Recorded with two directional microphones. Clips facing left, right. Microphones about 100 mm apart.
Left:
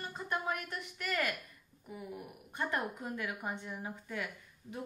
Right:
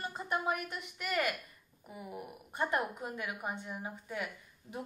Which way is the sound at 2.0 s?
25° right (ahead or behind).